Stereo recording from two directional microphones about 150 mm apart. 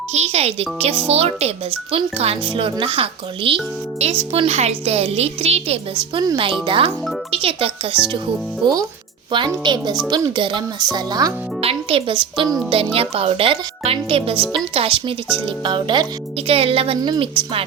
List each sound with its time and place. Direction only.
0.1 s a woman's voice: 45° right (ahead or behind)
7.9 s speech: 10° right (ahead or behind)
8.6 s speech: 25° right (ahead or behind)
11.6 s speech: 40° right (ahead or behind)
16.5 s speech: 40° right (ahead or behind)